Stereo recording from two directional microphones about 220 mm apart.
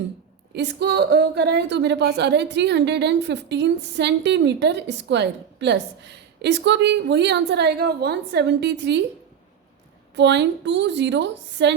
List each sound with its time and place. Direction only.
0.5 s speech: 50° right (ahead or behind)
10.2 s speech: 50° right (ahead or behind)